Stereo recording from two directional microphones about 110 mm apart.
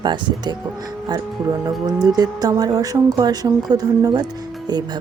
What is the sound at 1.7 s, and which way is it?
Speech, 35° right (ahead or behind).